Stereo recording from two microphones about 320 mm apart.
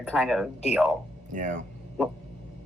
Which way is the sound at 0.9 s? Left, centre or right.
Right.